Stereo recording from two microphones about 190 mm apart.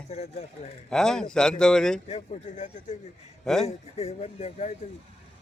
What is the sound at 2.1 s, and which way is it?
Speech, 40° left (ahead or behind).